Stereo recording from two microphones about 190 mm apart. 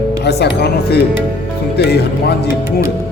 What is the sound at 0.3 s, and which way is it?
Speech, 60° left (ahead or behind).